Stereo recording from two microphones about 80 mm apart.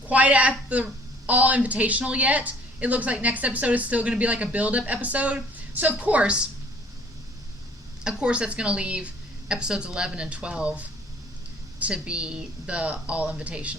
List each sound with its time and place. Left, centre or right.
0.1 s speech: centre
8.0 s speech: centre